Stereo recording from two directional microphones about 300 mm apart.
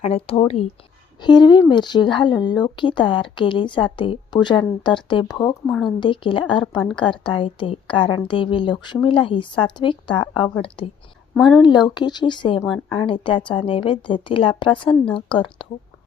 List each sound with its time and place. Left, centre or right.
0.0 s speech: centre
11.9 s speech: centre
14.8 s a woman's voice: centre
15.4 s speech: centre